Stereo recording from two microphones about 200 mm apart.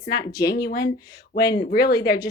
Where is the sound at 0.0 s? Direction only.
50° left (ahead or behind).